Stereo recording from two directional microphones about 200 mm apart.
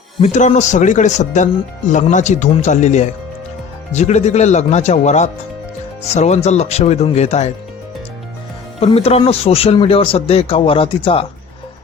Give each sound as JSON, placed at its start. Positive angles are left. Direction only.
{"t": 0.2, "sound": "speech", "side_deg": 35}
{"t": 8.8, "sound": "speech", "side_deg": 30}